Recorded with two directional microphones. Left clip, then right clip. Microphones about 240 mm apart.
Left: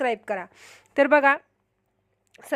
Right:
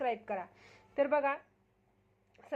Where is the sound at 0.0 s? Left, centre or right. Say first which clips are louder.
Left 9 dB; left.